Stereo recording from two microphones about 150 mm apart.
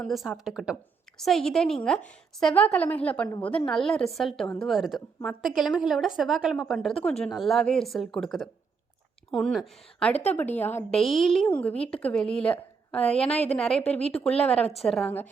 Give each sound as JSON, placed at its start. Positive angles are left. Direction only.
{"t": 0.0, "sound": "a woman's voice", "side_deg": 0}
{"t": 10.2, "sound": "a woman's voice", "side_deg": 10}
{"t": 10.9, "sound": "a woman's voice", "side_deg": 0}
{"t": 12.4, "sound": "a sound", "side_deg": 10}
{"t": 13.6, "sound": "a woman's voice", "side_deg": 5}
{"t": 14.0, "sound": "speech", "side_deg": 45}
{"t": 14.3, "sound": "a woman's voice", "side_deg": 5}
{"t": 14.6, "sound": "speech", "side_deg": 45}
{"t": 14.8, "sound": "a woman's voice", "side_deg": 0}